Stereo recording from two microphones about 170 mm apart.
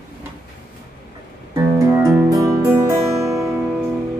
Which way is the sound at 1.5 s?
15° right (ahead or behind).